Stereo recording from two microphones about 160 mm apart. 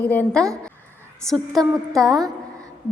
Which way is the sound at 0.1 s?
5° left (ahead or behind).